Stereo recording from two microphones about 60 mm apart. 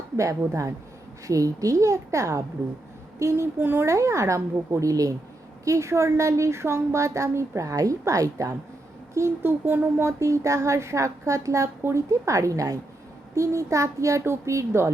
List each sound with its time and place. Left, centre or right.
0.2 s a woman's voice: right
2.6 s speech: right
3.6 s a sound: right
3.8 s a woman's voice: right
4.9 s speech: right
5.6 s a woman's voice: right
9.4 s a sound: right
10.2 s a woman's voice: right